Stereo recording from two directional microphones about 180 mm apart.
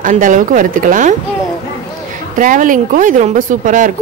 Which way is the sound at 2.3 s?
45° right (ahead or behind).